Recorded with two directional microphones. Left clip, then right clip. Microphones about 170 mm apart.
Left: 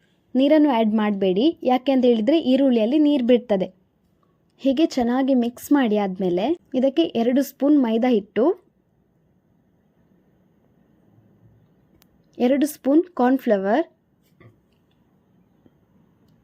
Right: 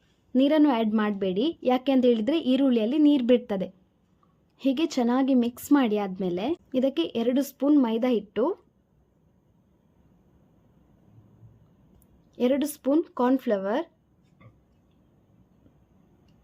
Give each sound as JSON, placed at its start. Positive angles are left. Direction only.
{"t": 0.3, "sound": "a woman's voice", "side_deg": 15}
{"t": 12.3, "sound": "speech", "side_deg": 20}